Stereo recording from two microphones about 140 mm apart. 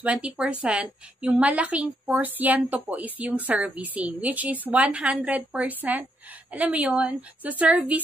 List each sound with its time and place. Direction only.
0.0 s a woman's voice: 10° right (ahead or behind)